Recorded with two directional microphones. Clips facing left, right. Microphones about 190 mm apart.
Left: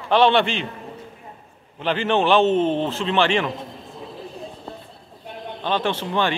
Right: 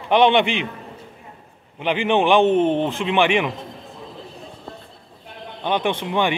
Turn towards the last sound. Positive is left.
turn(degrees=-15)  # may be behind; listen again after turning